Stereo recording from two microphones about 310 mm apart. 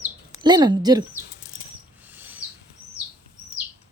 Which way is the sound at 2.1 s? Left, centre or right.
Centre.